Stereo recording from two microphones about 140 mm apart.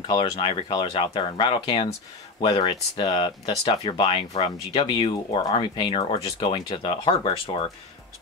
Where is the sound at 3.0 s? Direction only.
30° left (ahead or behind).